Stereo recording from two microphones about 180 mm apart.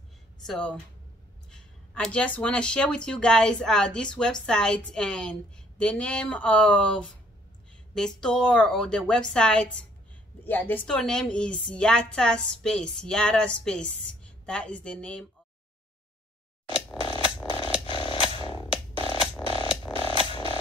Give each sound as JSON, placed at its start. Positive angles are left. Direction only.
{"t": 0.5, "sound": "a woman's voice", "side_deg": 5}
{"t": 17.0, "sound": "music", "side_deg": 30}
{"t": 17.8, "sound": "mechanisms", "side_deg": 30}
{"t": 18.4, "sound": "music", "side_deg": 25}
{"t": 19.4, "sound": "mechanisms", "side_deg": 30}